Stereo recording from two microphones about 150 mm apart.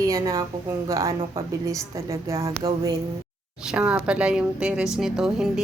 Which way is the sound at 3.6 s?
5° right (ahead or behind).